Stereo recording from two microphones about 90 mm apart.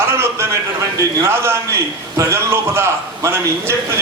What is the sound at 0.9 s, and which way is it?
A man's voice, 30° right (ahead or behind).